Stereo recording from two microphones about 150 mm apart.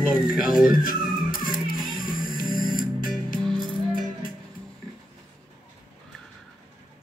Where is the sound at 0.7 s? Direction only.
65° left (ahead or behind).